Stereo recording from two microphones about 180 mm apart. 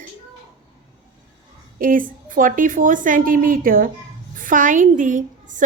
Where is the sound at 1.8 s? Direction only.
50° right (ahead or behind).